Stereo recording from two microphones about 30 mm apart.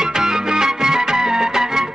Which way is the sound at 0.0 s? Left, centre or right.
Centre.